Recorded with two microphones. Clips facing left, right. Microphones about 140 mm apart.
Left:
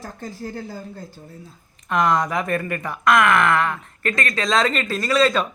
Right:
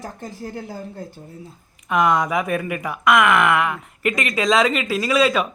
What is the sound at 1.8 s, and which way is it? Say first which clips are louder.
Speech: right 1 dB; 5° right (ahead or behind).